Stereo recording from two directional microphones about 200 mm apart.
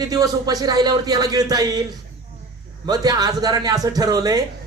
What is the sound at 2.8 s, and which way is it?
A man's voice, 20° right (ahead or behind).